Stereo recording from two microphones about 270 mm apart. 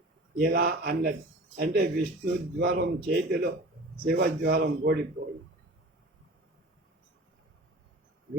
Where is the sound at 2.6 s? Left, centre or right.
Right.